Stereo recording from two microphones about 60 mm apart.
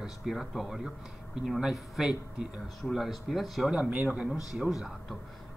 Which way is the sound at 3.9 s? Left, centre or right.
Centre.